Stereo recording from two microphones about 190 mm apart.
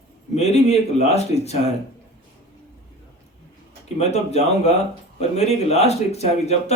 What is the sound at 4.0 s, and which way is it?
Speech, 35° left (ahead or behind).